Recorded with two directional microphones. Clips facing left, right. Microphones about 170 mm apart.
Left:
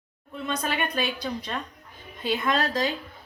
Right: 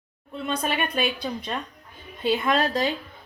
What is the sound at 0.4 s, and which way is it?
Speech, 30° right (ahead or behind).